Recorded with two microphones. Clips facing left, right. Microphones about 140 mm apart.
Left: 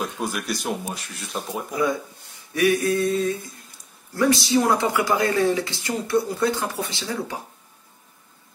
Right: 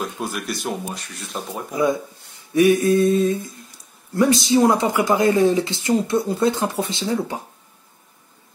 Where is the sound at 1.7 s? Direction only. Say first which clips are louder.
Right 4 dB; 20° right (ahead or behind).